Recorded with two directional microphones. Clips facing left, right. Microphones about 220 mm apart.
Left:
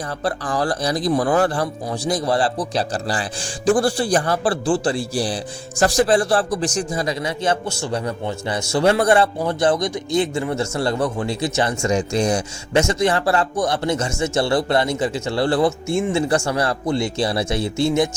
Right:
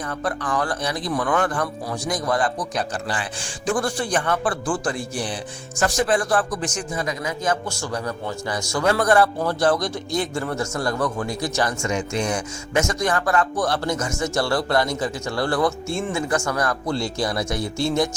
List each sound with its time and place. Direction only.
0.2 s a man's voice: 30° left (ahead or behind)
11.9 s a man's voice: 35° left (ahead or behind)